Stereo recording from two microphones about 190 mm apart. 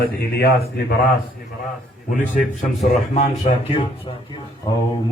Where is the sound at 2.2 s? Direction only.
40° left (ahead or behind).